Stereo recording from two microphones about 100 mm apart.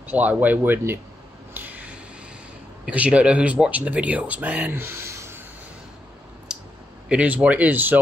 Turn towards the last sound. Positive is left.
turn(degrees=-20)  # may be behind; listen again after turning